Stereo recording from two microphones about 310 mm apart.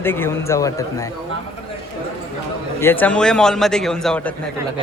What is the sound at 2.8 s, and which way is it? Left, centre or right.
A man's voice, centre.